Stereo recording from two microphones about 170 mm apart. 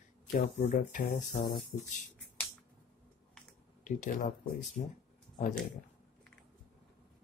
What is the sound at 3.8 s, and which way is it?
Speech, 50° left (ahead or behind).